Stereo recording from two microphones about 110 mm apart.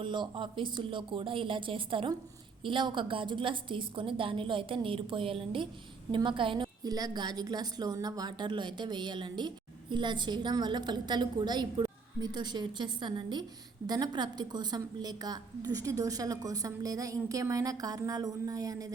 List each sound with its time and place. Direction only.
0.0 s a woman's voice: 45° right (ahead or behind)
6.8 s a woman's voice: 35° right (ahead or behind)